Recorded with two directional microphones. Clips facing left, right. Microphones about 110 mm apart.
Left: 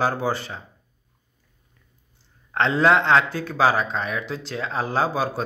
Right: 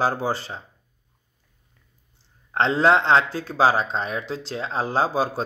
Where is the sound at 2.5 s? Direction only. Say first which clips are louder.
Even; 30° right (ahead or behind).